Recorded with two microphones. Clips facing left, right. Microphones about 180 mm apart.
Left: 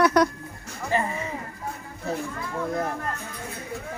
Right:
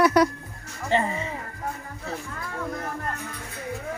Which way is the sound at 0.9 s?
25° right (ahead or behind).